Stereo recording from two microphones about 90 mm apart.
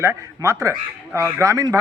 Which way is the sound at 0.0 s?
30° right (ahead or behind).